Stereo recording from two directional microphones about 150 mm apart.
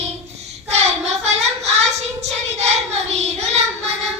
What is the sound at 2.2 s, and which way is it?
Child singing, 45° right (ahead or behind).